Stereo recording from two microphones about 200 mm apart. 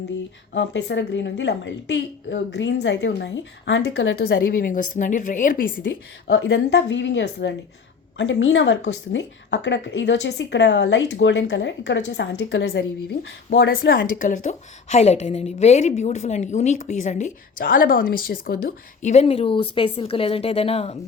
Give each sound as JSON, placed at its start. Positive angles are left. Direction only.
{"t": 0.5, "sound": "a woman's voice", "side_deg": 60}
{"t": 6.2, "sound": "a woman's voice", "side_deg": 65}